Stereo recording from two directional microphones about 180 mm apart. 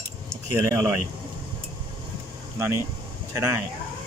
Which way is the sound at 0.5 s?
15° right (ahead or behind).